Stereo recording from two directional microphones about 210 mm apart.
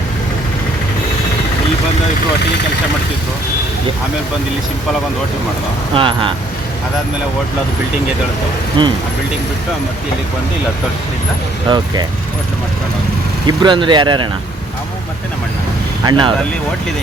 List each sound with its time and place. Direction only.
5.9 s speech: 25° right (ahead or behind)
8.8 s speech: 20° right (ahead or behind)
13.6 s speech: 20° right (ahead or behind)
16.0 s speech: 25° right (ahead or behind)